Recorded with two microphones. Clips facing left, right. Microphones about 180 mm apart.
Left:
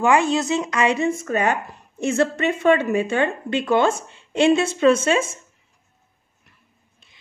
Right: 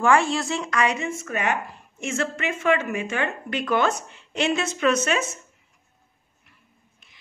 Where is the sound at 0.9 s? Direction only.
35° left (ahead or behind).